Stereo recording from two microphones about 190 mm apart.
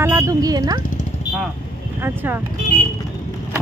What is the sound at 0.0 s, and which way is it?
Speech, 15° right (ahead or behind).